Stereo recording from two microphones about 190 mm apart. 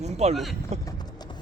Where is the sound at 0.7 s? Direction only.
35° right (ahead or behind).